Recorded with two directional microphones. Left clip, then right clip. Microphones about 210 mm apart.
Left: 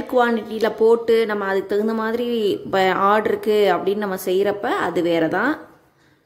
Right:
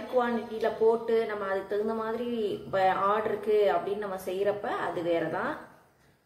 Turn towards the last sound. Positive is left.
turn(degrees=55)  # may be behind; listen again after turning